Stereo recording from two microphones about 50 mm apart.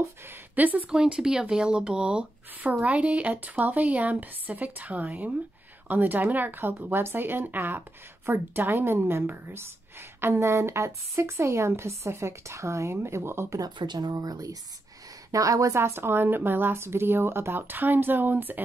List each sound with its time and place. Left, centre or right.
0.3 s speech: right
0.8 s a woman's voice: centre; by 10.5 s right
10.5 s a woman's voice: right
12.9 s speech: right
15.3 s a woman's voice: right